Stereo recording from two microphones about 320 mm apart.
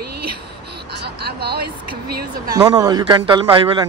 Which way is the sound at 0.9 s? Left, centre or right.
Right.